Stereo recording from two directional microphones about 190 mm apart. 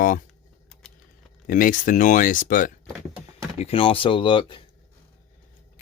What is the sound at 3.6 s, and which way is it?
Speech, 30° left (ahead or behind).